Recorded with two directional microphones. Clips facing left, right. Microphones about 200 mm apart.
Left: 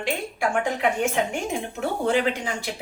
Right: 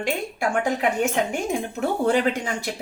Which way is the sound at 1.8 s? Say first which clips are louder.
Right 2 dB; 40° right (ahead or behind).